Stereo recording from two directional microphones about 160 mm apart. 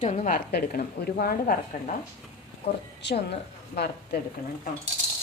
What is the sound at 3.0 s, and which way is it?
A woman's voice, 90° left.